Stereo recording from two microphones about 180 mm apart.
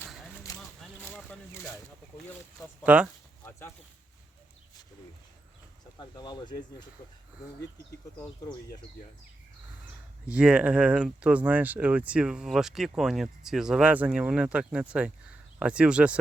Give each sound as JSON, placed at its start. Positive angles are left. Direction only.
{"t": 0.0, "sound": "a sound", "side_deg": 0}
{"t": 2.8, "sound": "speech", "side_deg": -5}
{"t": 6.0, "sound": "speech", "side_deg": 25}
{"t": 10.2, "sound": "speech", "side_deg": -5}